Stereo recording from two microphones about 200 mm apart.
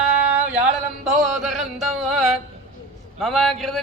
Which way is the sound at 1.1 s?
Centre (ahead or behind).